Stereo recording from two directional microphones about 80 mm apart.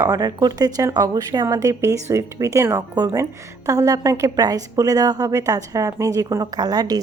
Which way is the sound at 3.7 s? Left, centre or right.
Right.